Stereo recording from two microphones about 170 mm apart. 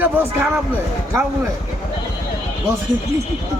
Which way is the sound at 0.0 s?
10° right (ahead or behind).